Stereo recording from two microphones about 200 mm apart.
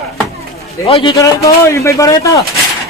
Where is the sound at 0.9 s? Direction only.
30° left (ahead or behind).